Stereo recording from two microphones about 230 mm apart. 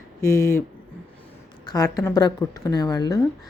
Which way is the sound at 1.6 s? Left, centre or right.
Centre.